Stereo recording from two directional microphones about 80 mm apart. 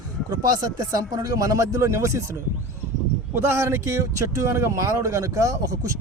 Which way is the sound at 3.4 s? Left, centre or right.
Right.